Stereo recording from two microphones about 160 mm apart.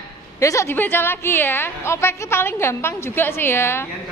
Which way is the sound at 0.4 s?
20° left (ahead or behind).